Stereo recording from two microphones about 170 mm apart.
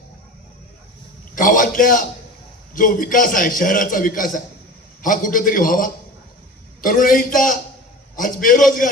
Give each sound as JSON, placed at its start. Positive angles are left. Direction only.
{"t": 1.4, "sound": "a man's voice", "side_deg": 50}